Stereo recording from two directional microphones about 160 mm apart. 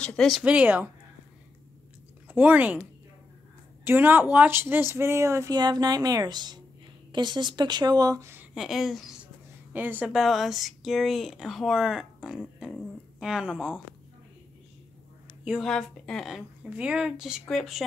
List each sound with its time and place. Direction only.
0.0 s a woman's voice: 5° left (ahead or behind)
0.4 s speech: 10° right (ahead or behind)
2.2 s speech: 10° right (ahead or behind)
3.8 s speech: 15° right (ahead or behind)
8.5 s a woman's voice: centre (ahead or behind)
15.4 s a woman's voice: centre (ahead or behind)